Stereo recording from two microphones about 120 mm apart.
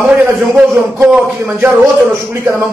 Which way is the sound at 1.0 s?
5° right (ahead or behind).